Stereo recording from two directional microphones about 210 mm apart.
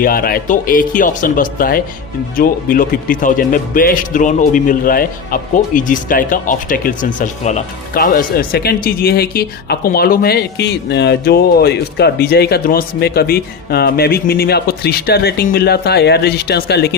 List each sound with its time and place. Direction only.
0.0 s speech: 45° left (ahead or behind)